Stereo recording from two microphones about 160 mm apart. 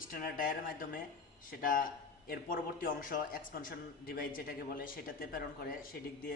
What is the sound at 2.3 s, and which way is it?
A man's voice, 60° left (ahead or behind).